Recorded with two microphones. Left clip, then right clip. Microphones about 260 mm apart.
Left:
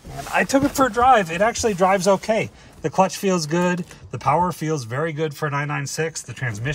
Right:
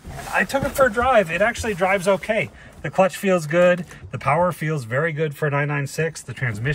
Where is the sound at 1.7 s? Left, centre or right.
Centre.